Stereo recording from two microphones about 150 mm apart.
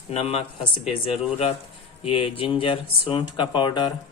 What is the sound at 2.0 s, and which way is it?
Speech, 40° left (ahead or behind).